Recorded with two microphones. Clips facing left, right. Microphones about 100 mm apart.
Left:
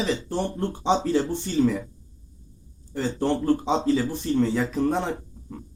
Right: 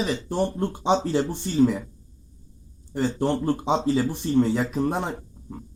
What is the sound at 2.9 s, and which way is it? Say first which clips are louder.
Speech: right 1 dB; 15° right (ahead or behind).